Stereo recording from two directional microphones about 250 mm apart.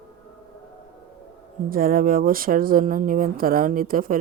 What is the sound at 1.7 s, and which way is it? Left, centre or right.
A woman's voice, right.